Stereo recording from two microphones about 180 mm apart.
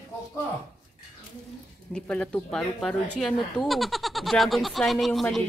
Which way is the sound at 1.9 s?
5° left (ahead or behind).